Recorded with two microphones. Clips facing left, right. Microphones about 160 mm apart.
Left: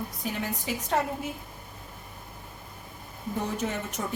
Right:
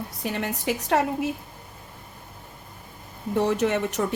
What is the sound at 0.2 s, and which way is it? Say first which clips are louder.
A woman's voice: right 6 dB; 70° right (ahead or behind).